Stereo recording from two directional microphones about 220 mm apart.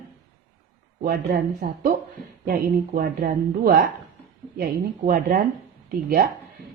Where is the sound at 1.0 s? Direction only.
40° right (ahead or behind).